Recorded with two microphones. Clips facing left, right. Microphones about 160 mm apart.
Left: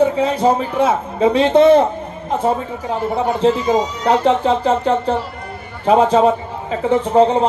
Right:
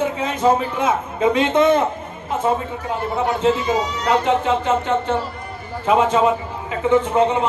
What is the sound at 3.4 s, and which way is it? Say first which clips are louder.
A man's voice: left 5 dB; 35° left (ahead or behind).